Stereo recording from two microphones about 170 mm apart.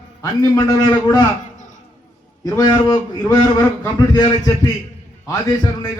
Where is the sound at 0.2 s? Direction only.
20° left (ahead or behind).